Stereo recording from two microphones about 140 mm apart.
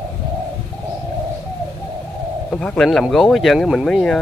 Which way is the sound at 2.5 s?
5° left (ahead or behind).